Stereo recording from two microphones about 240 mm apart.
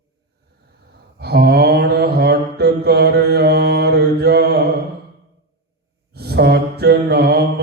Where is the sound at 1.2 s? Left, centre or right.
Right.